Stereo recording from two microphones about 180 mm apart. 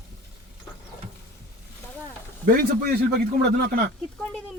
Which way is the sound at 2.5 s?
55° right (ahead or behind).